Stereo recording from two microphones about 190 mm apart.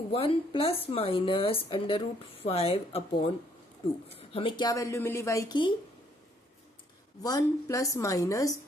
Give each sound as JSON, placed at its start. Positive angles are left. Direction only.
{"t": 0.1, "sound": "speech", "side_deg": 30}
{"t": 7.2, "sound": "a woman's voice", "side_deg": 20}